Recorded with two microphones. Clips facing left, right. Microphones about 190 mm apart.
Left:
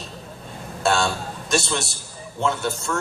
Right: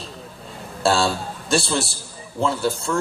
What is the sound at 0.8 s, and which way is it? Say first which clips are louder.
A man's voice: right 2 dB; 30° right (ahead or behind).